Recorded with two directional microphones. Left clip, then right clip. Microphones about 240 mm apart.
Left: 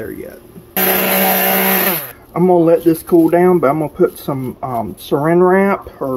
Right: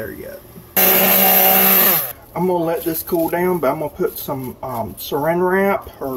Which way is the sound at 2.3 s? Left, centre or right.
Left.